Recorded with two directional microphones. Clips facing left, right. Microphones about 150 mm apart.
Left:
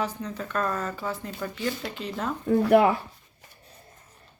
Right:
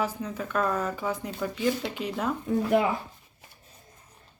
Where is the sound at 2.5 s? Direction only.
60° left (ahead or behind).